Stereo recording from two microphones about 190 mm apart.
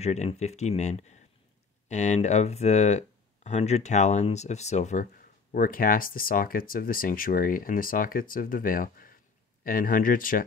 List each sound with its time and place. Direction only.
0.0 s speech: 35° left (ahead or behind)